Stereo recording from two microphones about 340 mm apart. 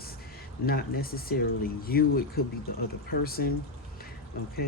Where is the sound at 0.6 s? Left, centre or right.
Left.